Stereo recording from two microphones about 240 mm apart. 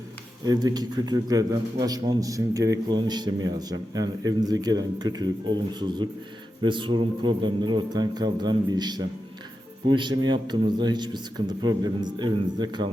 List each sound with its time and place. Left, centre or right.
0.4 s a man's voice: centre